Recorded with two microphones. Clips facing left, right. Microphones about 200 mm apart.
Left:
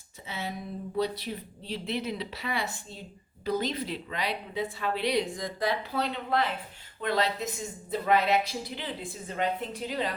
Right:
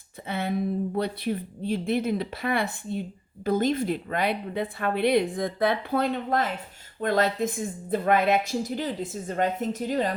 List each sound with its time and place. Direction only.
0.3 s speech: 55° right (ahead or behind)